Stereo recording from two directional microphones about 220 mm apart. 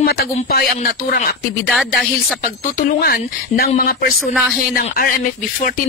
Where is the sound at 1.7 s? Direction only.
Centre (ahead or behind).